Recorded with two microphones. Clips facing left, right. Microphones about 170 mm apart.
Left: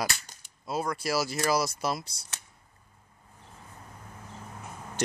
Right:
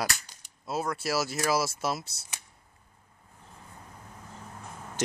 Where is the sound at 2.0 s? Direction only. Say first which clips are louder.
Left 1 dB; 25° right (ahead or behind).